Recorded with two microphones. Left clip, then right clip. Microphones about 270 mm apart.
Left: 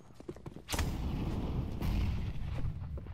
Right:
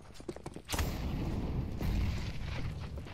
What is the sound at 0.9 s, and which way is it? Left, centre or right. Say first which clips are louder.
Artillery fire: right 1 dB; centre.